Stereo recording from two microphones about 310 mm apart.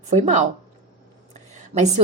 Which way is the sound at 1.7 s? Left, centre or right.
Right.